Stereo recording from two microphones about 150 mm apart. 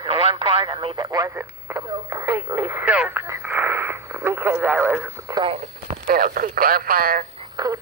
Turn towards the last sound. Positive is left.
turn(degrees=-25)  # may be behind; listen again after turning